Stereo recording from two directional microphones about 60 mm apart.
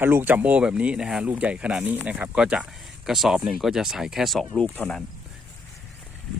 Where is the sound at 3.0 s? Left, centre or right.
Centre.